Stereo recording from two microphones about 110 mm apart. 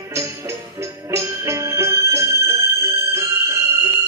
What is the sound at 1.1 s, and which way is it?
Music, 25° right (ahead or behind).